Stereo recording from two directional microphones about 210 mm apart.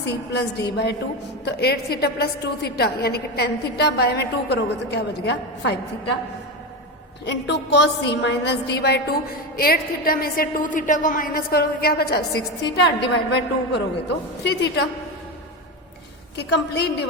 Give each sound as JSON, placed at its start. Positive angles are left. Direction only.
{"t": 0.0, "sound": "a woman's voice", "side_deg": 50}
{"t": 7.3, "sound": "a woman's voice", "side_deg": 55}
{"t": 16.4, "sound": "a woman's voice", "side_deg": 50}